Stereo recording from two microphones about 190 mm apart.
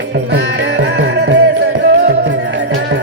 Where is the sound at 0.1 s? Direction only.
65° right (ahead or behind).